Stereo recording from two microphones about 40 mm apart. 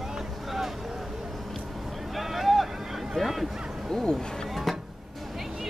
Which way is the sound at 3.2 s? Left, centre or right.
Centre.